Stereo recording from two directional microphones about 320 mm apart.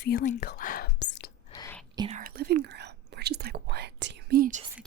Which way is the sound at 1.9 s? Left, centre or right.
Centre.